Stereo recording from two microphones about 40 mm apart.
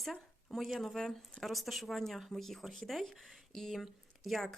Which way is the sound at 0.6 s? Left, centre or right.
Centre.